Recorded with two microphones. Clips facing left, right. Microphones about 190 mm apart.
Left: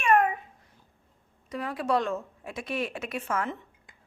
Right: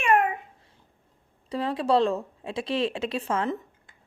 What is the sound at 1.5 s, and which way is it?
Speech, 30° right (ahead or behind).